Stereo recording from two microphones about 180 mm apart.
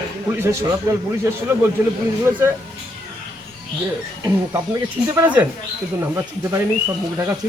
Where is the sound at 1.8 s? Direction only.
10° right (ahead or behind).